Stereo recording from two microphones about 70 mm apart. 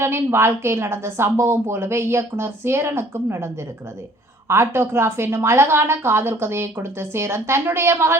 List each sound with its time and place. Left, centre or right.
0.0 s a woman's voice: right